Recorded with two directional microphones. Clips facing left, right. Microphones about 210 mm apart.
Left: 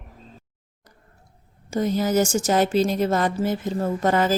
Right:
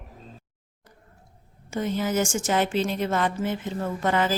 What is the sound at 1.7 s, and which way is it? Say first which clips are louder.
Speech: left 4 dB; 40° left (ahead or behind).